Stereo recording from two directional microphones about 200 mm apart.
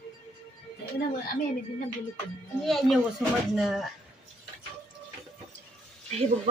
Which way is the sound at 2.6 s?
Centre (ahead or behind).